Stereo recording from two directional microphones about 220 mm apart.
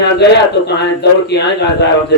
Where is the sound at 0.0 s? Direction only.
50° left (ahead or behind).